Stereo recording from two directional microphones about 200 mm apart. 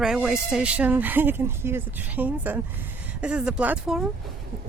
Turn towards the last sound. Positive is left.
turn(degrees=-5)  # may be behind; listen again after turning